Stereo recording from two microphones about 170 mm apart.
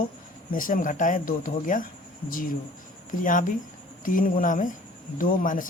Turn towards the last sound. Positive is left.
turn(degrees=50)  # may be behind; listen again after turning